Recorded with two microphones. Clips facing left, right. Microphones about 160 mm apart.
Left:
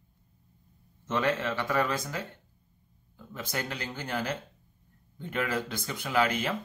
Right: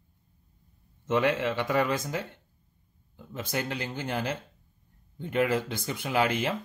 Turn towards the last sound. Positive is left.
turn(degrees=-25)  # may be behind; listen again after turning